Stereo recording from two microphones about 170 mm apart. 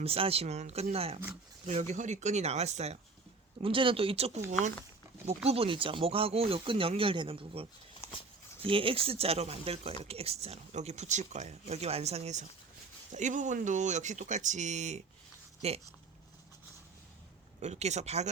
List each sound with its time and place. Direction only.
0.0 s speech: 35° right (ahead or behind)
5.5 s speech: 35° right (ahead or behind)
17.6 s speech: 40° right (ahead or behind)